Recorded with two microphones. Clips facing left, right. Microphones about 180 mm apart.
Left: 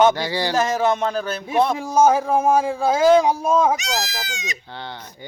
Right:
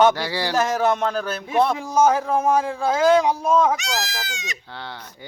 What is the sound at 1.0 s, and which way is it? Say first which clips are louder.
A man's voice: left 1 dB; 10° left (ahead or behind).